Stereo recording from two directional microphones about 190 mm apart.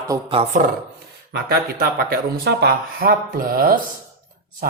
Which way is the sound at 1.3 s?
55° right (ahead or behind).